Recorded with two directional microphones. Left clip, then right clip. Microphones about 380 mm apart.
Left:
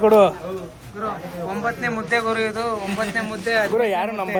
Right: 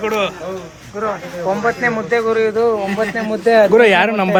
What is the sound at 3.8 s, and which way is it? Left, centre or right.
Speech, right.